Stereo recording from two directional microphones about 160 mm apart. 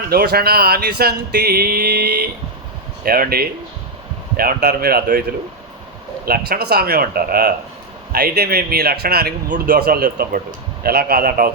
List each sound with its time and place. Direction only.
0.1 s a man's voice: 75° right (ahead or behind)
3.0 s a man's voice: 70° right (ahead or behind)
6.2 s a man's voice: 70° right (ahead or behind)